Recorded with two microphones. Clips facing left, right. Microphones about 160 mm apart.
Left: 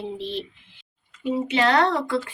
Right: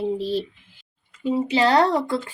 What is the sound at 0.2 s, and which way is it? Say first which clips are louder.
Speech: right 6 dB; 40° right (ahead or behind).